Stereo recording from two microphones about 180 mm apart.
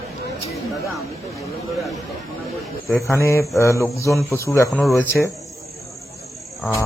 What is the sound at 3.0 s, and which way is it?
Speech, 15° left (ahead or behind).